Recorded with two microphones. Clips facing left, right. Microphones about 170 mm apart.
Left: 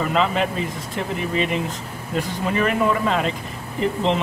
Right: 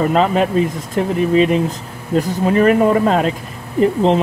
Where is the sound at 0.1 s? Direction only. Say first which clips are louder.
Right 6 dB; 45° right (ahead or behind).